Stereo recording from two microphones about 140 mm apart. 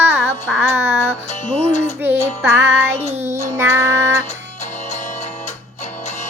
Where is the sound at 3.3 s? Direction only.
20° right (ahead or behind).